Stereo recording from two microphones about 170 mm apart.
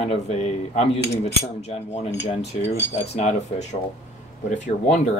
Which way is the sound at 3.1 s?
40° left (ahead or behind).